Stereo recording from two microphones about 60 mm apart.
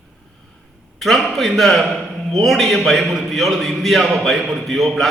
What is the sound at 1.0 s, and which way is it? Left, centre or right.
A man's voice, centre.